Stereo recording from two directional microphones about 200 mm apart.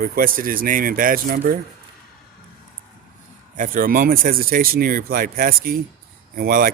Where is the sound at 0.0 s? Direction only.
45° right (ahead or behind).